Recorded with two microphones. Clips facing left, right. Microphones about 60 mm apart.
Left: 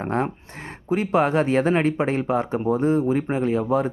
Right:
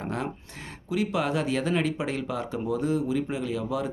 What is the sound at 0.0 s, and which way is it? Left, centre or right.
Speech, left.